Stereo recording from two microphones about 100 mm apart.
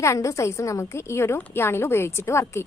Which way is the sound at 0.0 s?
30° left (ahead or behind).